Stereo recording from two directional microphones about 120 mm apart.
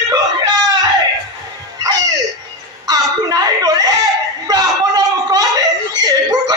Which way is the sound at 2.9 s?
35° right (ahead or behind).